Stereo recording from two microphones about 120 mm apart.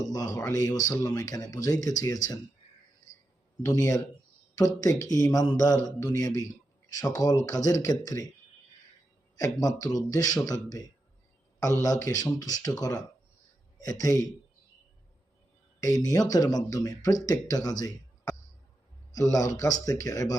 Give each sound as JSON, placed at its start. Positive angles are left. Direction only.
{"t": 0.0, "sound": "speech", "side_deg": 30}
{"t": 3.7, "sound": "speech", "side_deg": 25}
{"t": 9.3, "sound": "speech", "side_deg": 30}
{"t": 14.0, "sound": "speech", "side_deg": 30}
{"t": 15.8, "sound": "speech", "side_deg": 30}